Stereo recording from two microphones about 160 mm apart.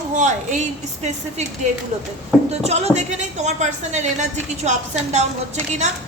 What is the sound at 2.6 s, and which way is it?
A woman's voice, 40° right (ahead or behind).